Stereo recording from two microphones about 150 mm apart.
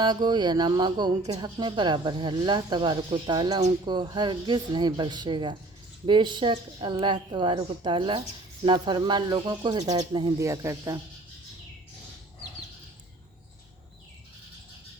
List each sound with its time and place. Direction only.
0.0 s speech: 30° right (ahead or behind)